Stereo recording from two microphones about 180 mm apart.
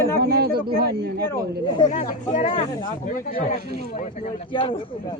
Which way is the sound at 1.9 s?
35° left (ahead or behind).